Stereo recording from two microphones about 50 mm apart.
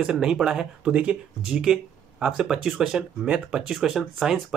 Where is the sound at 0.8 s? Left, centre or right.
Right.